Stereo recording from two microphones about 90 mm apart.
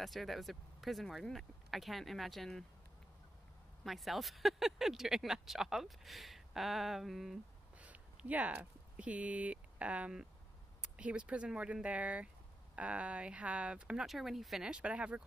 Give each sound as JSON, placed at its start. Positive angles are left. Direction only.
{"t": 0.0, "sound": "speech", "side_deg": 0}
{"t": 3.8, "sound": "speech", "side_deg": 0}
{"t": 7.7, "sound": "speech", "side_deg": -15}